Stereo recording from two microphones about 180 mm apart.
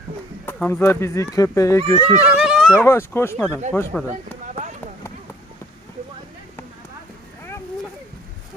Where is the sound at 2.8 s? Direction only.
15° left (ahead or behind).